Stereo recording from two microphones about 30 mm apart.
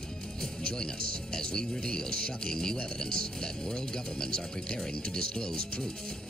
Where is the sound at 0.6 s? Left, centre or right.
Left.